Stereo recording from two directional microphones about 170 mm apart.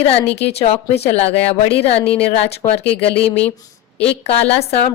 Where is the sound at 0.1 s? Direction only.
35° left (ahead or behind).